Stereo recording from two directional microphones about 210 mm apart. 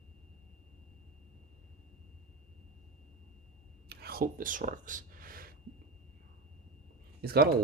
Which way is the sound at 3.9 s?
45° right (ahead or behind).